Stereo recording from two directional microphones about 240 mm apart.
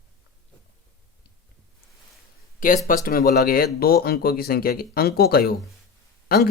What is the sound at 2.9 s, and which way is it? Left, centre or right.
Speech, left.